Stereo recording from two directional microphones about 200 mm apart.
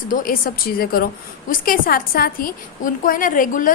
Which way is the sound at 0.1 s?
45° left (ahead or behind).